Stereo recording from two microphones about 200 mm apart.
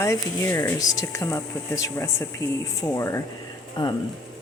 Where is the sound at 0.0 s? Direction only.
15° left (ahead or behind).